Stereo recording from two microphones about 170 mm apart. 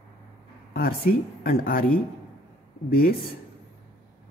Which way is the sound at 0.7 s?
60° left (ahead or behind).